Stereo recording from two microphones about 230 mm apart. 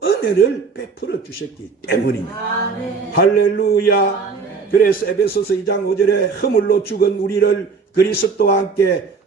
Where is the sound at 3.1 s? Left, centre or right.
Left.